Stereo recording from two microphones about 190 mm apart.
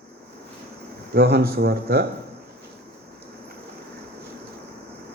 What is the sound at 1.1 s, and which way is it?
Speech, 55° right (ahead or behind).